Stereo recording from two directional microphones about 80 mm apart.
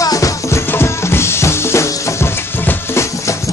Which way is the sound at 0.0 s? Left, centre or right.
Left.